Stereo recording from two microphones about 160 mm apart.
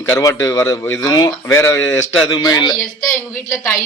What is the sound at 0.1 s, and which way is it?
A man's voice, 20° left (ahead or behind).